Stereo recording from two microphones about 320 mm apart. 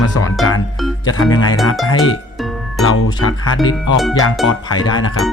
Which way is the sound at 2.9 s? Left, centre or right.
Left.